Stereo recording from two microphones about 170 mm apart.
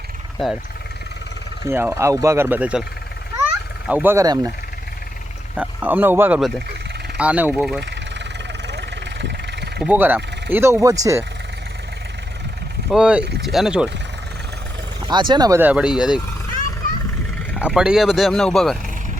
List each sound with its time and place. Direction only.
1.6 s speech: 15° right (ahead or behind)
3.3 s a sound: 10° right (ahead or behind)
5.5 s speech: 10° right (ahead or behind)
7.8 s vehicle: 90° right
9.8 s speech: 10° right (ahead or behind)
12.9 s speech: 5° right (ahead or behind)
15.0 s speech: 25° right (ahead or behind); by 16.2 s 5° right (ahead or behind)
17.6 s speech: 5° right (ahead or behind)